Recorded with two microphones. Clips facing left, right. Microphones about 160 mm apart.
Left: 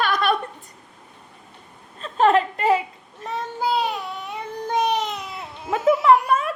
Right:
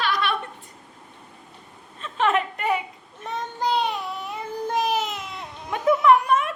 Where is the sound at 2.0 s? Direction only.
35° left (ahead or behind).